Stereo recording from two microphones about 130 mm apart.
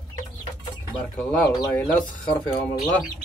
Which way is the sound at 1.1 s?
5° left (ahead or behind).